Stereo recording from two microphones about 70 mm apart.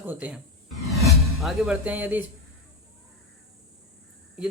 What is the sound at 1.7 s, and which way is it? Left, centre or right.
Speech, right.